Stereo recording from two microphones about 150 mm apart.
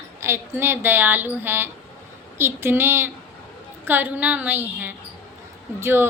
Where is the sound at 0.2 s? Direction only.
15° right (ahead or behind).